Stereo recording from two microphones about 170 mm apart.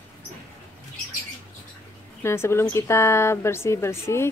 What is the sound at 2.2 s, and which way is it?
Speech, 15° left (ahead or behind).